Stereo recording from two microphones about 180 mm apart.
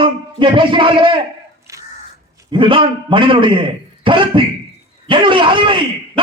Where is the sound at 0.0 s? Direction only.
30° right (ahead or behind).